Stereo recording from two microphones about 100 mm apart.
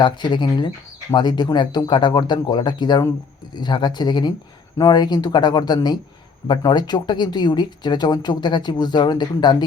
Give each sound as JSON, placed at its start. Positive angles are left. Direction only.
{"t": 0.0, "sound": "speech", "side_deg": 50}